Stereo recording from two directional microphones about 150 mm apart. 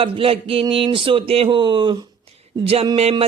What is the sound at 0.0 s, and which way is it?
A man's voice, 40° right (ahead or behind).